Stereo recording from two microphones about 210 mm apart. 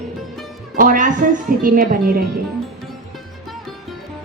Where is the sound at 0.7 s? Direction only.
40° right (ahead or behind).